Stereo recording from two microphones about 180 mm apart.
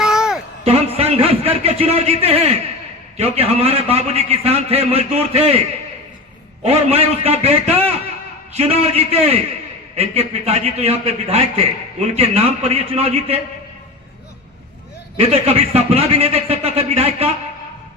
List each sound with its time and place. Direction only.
0.0 s a sound: 5° right (ahead or behind)
0.9 s a man's voice: 35° right (ahead or behind)
15.3 s a man's voice: 35° right (ahead or behind)